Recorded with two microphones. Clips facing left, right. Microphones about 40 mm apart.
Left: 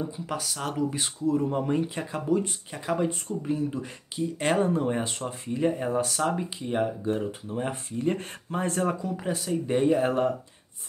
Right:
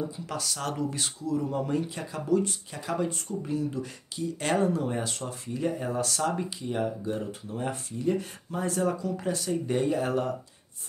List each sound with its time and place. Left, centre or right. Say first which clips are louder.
0.0 s speech: left 1 dB; centre
1.2 s speech: left 4 dB; left
6.6 s speech: left 5 dB; left
7.5 s speech: left 1 dB; centre
8.0 s speech: even; left
9.0 s speech: even; centre